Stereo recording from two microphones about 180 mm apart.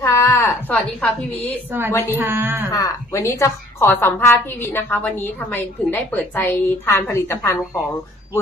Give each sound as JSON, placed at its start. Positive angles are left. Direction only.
{"t": 0.0, "sound": "a sound", "side_deg": 15}
{"t": 0.7, "sound": "a woman's voice", "side_deg": 5}
{"t": 2.1, "sound": "a woman's voice", "side_deg": -10}
{"t": 2.7, "sound": "a woman's voice", "side_deg": 15}